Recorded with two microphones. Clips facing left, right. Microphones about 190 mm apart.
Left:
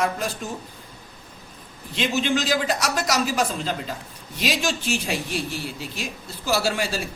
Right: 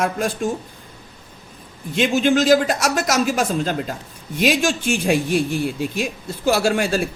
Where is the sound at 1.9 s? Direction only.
50° right (ahead or behind).